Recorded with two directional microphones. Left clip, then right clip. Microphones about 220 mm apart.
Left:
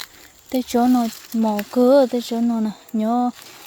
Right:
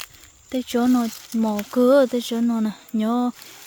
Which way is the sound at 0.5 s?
Centre (ahead or behind).